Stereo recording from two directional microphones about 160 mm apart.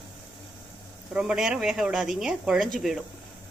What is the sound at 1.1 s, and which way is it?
Speech, 5° right (ahead or behind).